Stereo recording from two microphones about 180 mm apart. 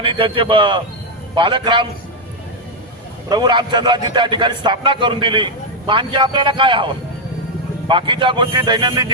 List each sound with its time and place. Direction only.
0.0 s a man's voice: 30° right (ahead or behind)
3.2 s a man's voice: 25° right (ahead or behind)